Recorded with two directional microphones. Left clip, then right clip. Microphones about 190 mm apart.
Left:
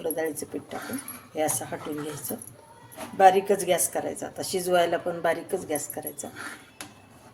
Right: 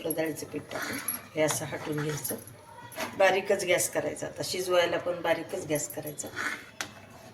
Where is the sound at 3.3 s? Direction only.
45° left (ahead or behind).